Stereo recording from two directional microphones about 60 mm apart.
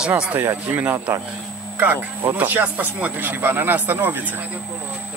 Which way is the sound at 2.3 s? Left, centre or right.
Right.